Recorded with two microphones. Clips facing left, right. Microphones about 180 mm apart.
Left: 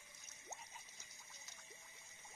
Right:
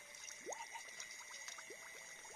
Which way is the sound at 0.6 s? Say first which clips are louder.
Right 5 dB; 65° right (ahead or behind).